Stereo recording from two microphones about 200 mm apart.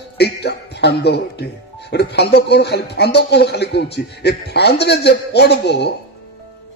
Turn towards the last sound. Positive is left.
turn(degrees=55)  # may be behind; listen again after turning